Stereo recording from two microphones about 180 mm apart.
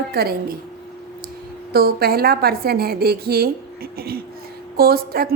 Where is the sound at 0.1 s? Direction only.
60° right (ahead or behind).